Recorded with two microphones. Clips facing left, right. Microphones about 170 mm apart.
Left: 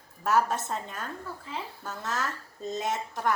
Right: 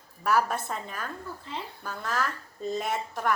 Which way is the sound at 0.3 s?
20° left (ahead or behind).